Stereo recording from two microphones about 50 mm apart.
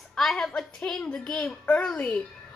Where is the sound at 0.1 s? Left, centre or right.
Centre.